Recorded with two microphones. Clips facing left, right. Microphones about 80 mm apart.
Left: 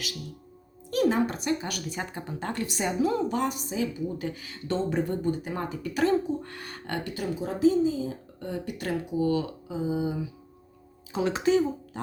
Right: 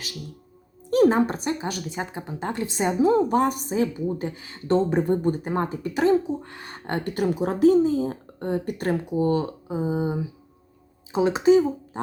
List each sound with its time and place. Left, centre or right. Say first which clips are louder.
0.9 s speech: right 6 dB; right
3.2 s speech: right 6 dB; right
4.7 s speech: right 7 dB; right
7.0 s speech: right 10 dB; right
11.1 s speech: right 6 dB; right